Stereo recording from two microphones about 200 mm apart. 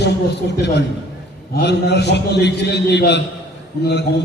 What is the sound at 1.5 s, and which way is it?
A man's voice, 60° left (ahead or behind).